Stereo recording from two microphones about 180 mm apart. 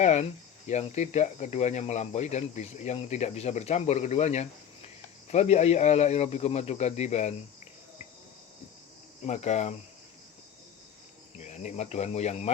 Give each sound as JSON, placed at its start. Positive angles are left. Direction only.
{"t": 0.0, "sound": "speech", "side_deg": 40}
{"t": 9.2, "sound": "speech", "side_deg": 40}
{"t": 11.3, "sound": "speech", "side_deg": 40}